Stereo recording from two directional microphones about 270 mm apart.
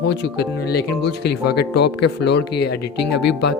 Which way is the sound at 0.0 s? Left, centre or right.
Left.